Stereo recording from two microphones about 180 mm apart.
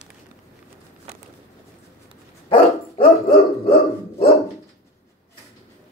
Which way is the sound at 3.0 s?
30° left (ahead or behind).